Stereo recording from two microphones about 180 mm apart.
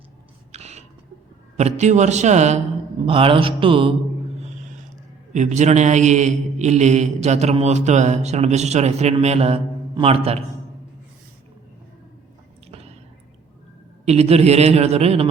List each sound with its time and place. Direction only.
0.5 s a sound: 35° right (ahead or behind)
1.5 s a man's voice: 40° right (ahead or behind)
3.1 s mantra: 30° right (ahead or behind)
5.3 s a man's voice: 40° right (ahead or behind)
12.6 s squish: 35° right (ahead or behind)
14.0 s a man's voice: 35° right (ahead or behind)